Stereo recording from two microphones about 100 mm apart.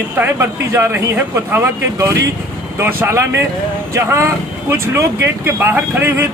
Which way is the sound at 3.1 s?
25° right (ahead or behind).